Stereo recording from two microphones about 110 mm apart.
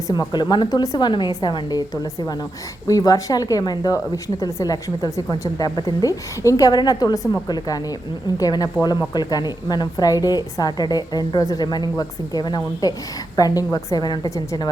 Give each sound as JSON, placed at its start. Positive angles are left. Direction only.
{"t": 0.1, "sound": "speech", "side_deg": 40}